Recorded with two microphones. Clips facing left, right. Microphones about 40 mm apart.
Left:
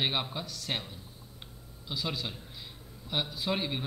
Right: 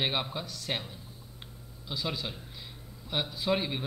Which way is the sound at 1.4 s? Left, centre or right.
Centre.